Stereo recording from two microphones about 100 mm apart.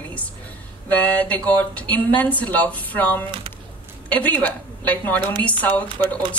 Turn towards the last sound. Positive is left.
turn(degrees=15)  # may be behind; listen again after turning